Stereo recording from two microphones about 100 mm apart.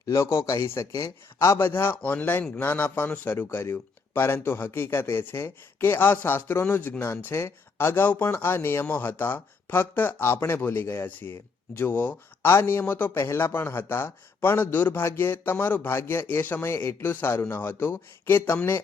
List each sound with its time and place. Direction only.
0.0 s a man's voice: 30° left (ahead or behind)